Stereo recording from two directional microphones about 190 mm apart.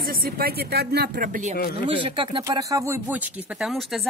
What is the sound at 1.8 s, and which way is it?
Speech, 25° right (ahead or behind).